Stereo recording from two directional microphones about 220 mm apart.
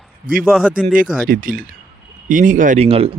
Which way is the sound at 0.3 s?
40° right (ahead or behind).